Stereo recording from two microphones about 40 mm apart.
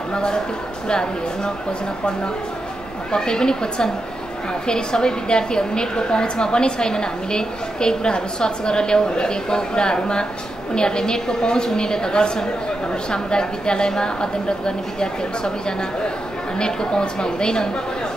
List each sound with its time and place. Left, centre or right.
0.1 s a woman's voice: left
3.1 s a woman's voice: centre
16.5 s a woman's voice: left